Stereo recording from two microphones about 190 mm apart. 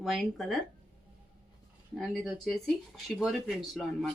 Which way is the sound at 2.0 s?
Centre (ahead or behind).